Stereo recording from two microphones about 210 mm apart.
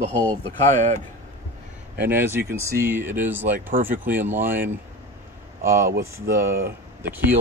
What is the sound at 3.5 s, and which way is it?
Speech, 40° right (ahead or behind).